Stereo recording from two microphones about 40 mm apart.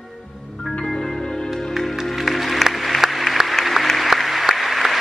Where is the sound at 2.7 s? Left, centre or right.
Centre.